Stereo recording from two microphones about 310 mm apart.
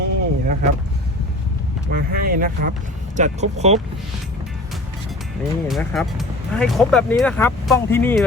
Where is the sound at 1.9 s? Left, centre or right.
Right.